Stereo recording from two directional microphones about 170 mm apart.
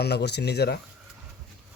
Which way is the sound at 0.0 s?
80° left.